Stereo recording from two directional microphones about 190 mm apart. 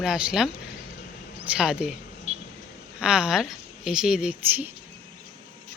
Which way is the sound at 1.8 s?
5° right (ahead or behind).